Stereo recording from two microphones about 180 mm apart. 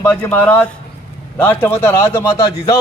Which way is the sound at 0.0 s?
15° left (ahead or behind).